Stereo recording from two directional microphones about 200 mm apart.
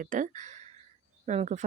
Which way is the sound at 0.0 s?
40° right (ahead or behind).